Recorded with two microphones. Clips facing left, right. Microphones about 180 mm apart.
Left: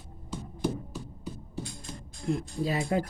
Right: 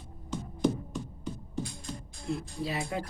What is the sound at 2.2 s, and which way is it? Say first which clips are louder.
Speech: left 4 dB; 40° left (ahead or behind).